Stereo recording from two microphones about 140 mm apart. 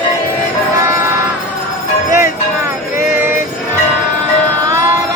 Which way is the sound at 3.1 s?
15° right (ahead or behind).